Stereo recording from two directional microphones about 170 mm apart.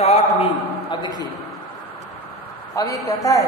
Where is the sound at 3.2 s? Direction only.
20° left (ahead or behind).